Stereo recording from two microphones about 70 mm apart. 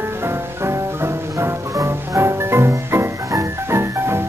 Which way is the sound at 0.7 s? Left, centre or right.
Right.